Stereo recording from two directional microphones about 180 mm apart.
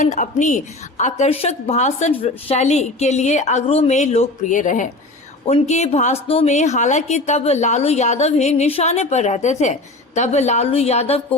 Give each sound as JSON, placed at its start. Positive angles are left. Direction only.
{"t": 0.0, "sound": "a woman's voice", "side_deg": 45}